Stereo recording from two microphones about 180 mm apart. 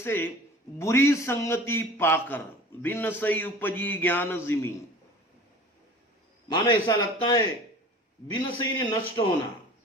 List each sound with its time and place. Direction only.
0.0 s a man's voice: 15° left (ahead or behind)
6.5 s a man's voice: 20° left (ahead or behind)